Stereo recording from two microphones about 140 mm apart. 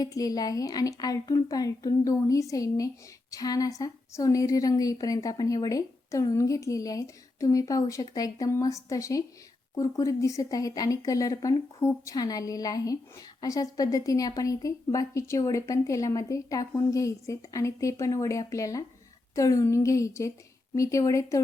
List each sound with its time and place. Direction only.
0.0 s speech: 25° left (ahead or behind)